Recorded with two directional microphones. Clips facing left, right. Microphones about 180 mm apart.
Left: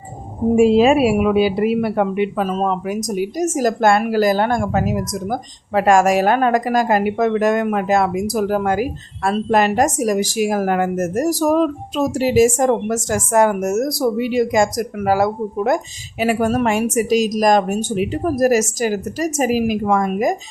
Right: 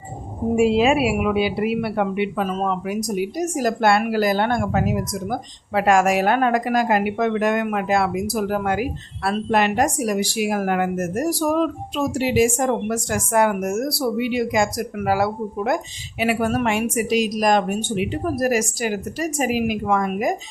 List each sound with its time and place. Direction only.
0.5 s a woman's voice: 40° left (ahead or behind)